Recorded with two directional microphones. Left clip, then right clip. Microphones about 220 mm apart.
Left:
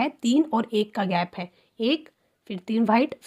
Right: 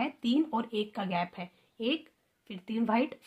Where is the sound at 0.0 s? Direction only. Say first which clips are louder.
Left 7 dB; 45° left (ahead or behind).